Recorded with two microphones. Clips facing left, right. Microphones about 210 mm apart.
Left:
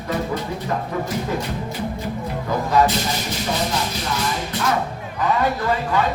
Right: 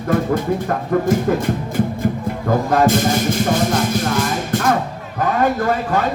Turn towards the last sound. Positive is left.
turn(degrees=-50)  # may be behind; listen again after turning